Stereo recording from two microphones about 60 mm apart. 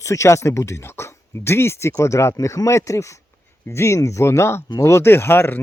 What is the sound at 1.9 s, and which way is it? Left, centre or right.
Speech, left.